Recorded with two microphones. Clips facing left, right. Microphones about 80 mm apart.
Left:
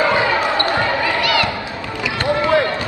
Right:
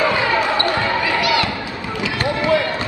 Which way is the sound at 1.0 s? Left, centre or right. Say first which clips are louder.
Even; right.